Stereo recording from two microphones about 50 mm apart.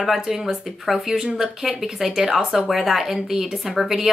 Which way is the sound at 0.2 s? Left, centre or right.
Centre.